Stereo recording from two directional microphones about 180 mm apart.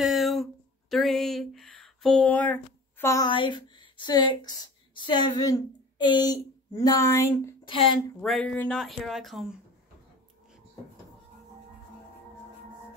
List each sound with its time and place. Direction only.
0.0 s a sound: centre (ahead or behind); by 3.3 s 15° left (ahead or behind)
3.3 s speech: 25° left (ahead or behind)
7.6 s a woman's voice: 30° left (ahead or behind)
8.2 s speech: 5° left (ahead or behind)